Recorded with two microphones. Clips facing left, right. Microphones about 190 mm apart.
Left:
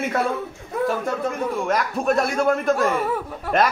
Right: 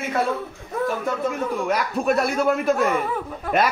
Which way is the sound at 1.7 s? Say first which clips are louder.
Even; 5° right (ahead or behind).